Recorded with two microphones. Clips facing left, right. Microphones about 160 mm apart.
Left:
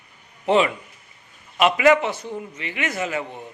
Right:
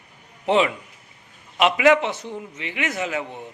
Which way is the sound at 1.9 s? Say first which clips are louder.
Even; 20° right (ahead or behind).